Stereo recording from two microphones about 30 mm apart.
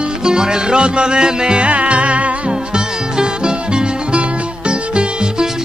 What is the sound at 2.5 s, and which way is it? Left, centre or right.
Music, right.